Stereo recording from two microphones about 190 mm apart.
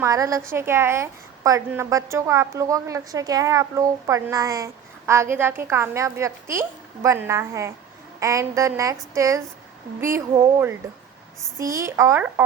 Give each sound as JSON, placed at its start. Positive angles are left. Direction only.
{"t": 0.0, "sound": "a woman's voice", "side_deg": -15}